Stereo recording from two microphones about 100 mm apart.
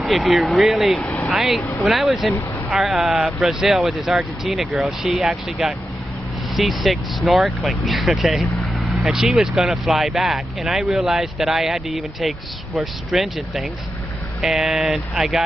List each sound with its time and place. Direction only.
0.0 s speech: centre (ahead or behind)
1.0 s vehicle: 15° left (ahead or behind)
1.3 s speech: 5° right (ahead or behind)